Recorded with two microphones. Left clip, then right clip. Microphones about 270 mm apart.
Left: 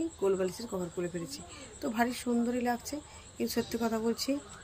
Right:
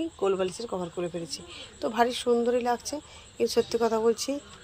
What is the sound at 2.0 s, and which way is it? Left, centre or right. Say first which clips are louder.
Speech: right 8 dB; right.